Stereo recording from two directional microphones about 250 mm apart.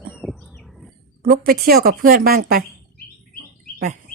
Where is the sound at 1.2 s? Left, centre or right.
Right.